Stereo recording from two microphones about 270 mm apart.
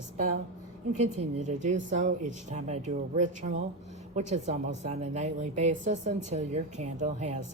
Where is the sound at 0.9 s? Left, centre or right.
Right.